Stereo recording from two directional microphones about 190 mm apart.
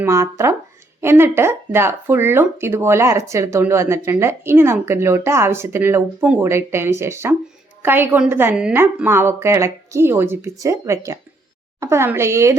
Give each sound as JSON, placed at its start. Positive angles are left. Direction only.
{"t": 0.0, "sound": "speech", "side_deg": -15}